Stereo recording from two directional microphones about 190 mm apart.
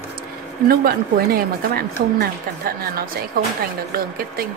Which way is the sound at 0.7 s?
55° right (ahead or behind).